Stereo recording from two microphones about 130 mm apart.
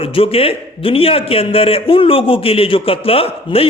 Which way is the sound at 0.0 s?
45° left (ahead or behind).